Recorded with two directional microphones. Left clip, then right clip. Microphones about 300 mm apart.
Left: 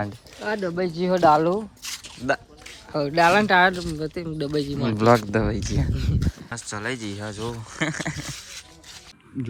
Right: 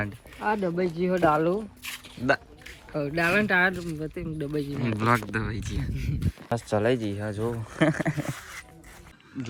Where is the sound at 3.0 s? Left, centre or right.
Centre.